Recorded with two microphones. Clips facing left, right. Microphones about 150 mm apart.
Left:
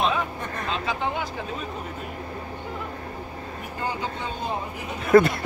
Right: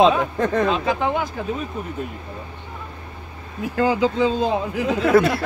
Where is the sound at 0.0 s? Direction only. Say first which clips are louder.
Right 9 dB; 90° right.